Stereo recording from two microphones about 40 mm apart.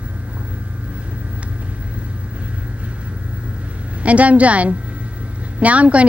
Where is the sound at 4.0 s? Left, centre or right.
Right.